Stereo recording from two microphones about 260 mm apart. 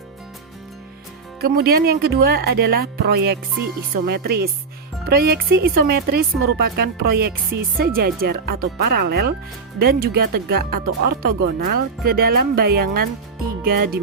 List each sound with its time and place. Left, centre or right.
1.4 s a woman's voice: right